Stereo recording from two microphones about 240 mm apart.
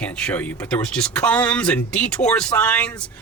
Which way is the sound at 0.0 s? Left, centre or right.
Centre.